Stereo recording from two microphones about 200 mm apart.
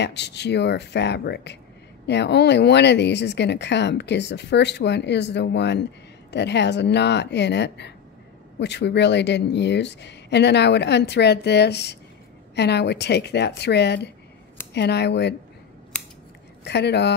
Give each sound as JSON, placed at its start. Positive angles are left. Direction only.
{"t": 0.0, "sound": "speech", "side_deg": 60}
{"t": 15.9, "sound": "scissors", "side_deg": 5}
{"t": 16.6, "sound": "speech", "side_deg": 55}